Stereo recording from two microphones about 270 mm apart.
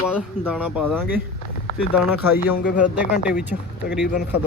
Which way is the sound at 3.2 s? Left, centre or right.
Centre.